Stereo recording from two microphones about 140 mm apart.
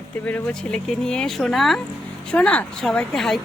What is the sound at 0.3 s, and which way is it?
A woman's voice, 10° left (ahead or behind).